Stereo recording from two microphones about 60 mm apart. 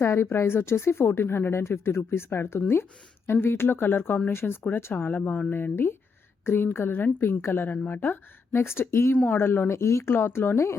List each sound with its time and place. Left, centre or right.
0.0 s a woman's voice: left
8.5 s speech: left
9.1 s speech: left
9.4 s speech: left
10.1 s speech: left